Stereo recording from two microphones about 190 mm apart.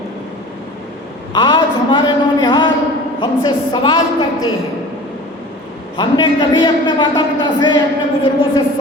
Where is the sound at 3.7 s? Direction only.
25° left (ahead or behind).